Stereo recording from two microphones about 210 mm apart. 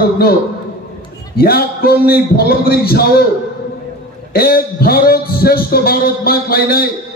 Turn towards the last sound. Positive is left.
turn(degrees=45)  # may be behind; listen again after turning